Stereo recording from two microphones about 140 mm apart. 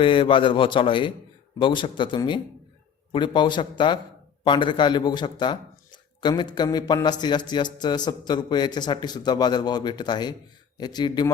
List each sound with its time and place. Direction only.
0.0 s speech: 35° left (ahead or behind)